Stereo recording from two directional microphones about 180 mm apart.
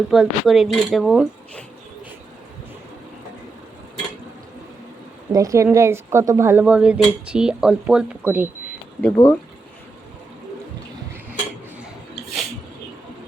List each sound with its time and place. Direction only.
0.1 s speech: centre (ahead or behind)
5.3 s speech: 20° right (ahead or behind)
9.0 s speech: 10° left (ahead or behind)